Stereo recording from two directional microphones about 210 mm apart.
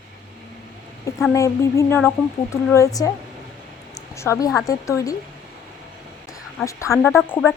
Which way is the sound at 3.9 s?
15° left (ahead or behind).